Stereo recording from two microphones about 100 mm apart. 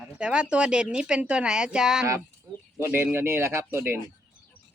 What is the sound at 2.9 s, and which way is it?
Speech, 25° right (ahead or behind).